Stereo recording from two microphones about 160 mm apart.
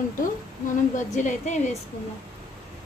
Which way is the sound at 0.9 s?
50° left (ahead or behind).